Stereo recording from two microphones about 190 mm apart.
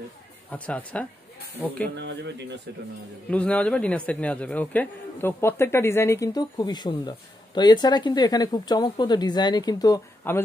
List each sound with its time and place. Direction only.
0.5 s speech: 5° left (ahead or behind)
2.0 s speech: 65° right (ahead or behind)
3.3 s a man's voice: 5° left (ahead or behind)